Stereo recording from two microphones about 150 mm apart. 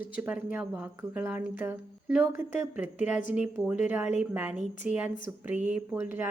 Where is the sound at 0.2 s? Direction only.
10° right (ahead or behind).